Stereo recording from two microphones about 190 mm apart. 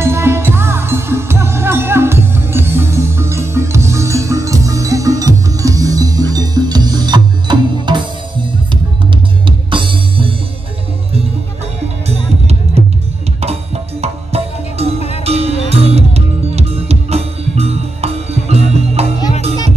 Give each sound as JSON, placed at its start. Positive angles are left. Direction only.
{"t": 0.0, "sound": "music", "side_deg": -15}
{"t": 9.7, "sound": "music", "side_deg": -25}
{"t": 12.1, "sound": "music", "side_deg": -35}
{"t": 14.0, "sound": "music", "side_deg": -35}